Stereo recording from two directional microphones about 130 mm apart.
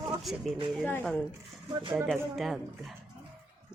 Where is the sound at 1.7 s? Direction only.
40° right (ahead or behind).